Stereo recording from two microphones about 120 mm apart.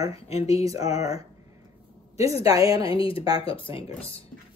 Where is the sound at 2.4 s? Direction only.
30° right (ahead or behind).